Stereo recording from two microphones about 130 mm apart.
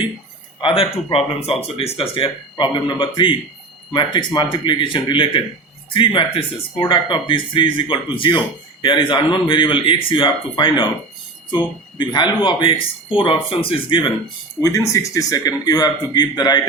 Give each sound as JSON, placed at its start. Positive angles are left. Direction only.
{"t": 0.6, "sound": "speech", "side_deg": 45}
{"t": 14.6, "sound": "speech", "side_deg": 25}